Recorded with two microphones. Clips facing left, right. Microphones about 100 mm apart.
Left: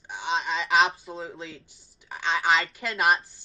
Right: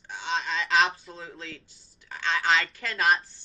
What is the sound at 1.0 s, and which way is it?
Speech, 25° left (ahead or behind).